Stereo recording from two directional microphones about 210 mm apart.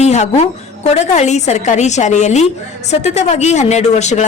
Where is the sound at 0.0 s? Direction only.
30° left (ahead or behind).